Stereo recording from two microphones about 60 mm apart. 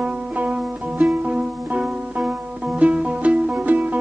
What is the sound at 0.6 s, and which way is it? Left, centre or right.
Music, centre.